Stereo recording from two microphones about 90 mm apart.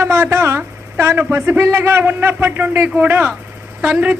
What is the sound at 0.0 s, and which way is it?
A man's voice, 30° right (ahead or behind).